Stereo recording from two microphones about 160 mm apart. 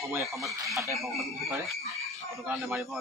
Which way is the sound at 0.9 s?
Centre (ahead or behind).